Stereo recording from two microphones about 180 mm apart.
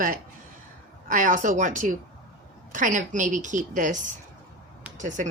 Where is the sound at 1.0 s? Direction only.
45° right (ahead or behind).